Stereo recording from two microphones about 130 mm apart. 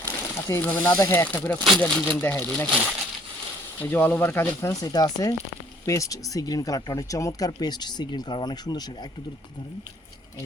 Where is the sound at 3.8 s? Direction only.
15° left (ahead or behind); by 9.1 s 30° left (ahead or behind).